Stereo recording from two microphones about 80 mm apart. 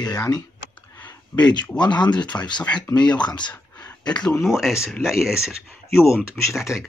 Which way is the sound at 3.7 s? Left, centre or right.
Centre.